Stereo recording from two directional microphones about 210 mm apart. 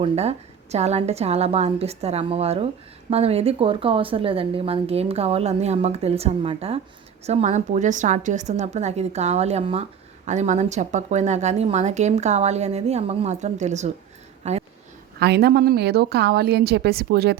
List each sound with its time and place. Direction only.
0.0 s speech: 30° right (ahead or behind)
15.2 s a woman's voice: 50° right (ahead or behind)